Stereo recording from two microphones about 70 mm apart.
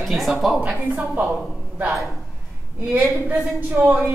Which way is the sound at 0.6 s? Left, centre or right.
Right.